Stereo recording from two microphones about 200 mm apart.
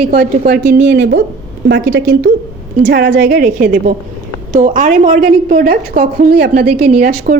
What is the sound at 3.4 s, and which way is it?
A woman's voice, 45° right (ahead or behind).